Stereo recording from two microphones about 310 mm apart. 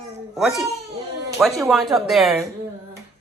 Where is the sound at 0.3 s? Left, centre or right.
Centre.